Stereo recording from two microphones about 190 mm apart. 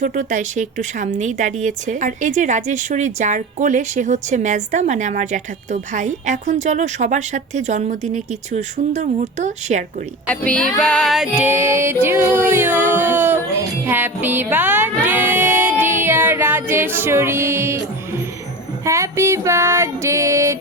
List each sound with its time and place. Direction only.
0.0 s speech: 40° right (ahead or behind)
10.2 s music: 5° left (ahead or behind); by 17.8 s 15° right (ahead or behind)
18.9 s music: 15° right (ahead or behind)